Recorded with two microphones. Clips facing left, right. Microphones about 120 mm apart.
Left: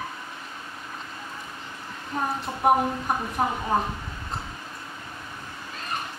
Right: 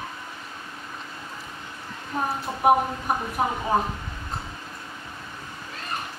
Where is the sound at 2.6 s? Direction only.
5° right (ahead or behind).